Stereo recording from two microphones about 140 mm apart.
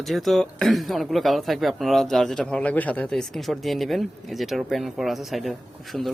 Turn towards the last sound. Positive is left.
turn(degrees=0)  # may be behind; listen again after turning